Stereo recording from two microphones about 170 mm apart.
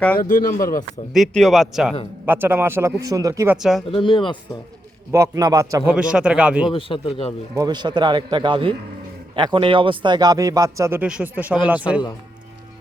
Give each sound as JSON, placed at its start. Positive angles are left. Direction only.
{"t": 0.2, "sound": "speech", "side_deg": 50}
{"t": 1.1, "sound": "a man's voice", "side_deg": 0}
{"t": 2.2, "sound": "a man's voice", "side_deg": -10}
{"t": 3.6, "sound": "a man's voice", "side_deg": 0}
{"t": 3.9, "sound": "speech", "side_deg": 30}
{"t": 5.1, "sound": "a man's voice", "side_deg": -20}
{"t": 5.9, "sound": "a man's voice", "side_deg": -5}
{"t": 6.7, "sound": "a man's voice", "side_deg": 30}
{"t": 7.5, "sound": "a man's voice", "side_deg": -25}